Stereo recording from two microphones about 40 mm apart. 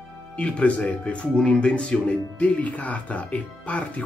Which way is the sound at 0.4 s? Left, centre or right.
Left.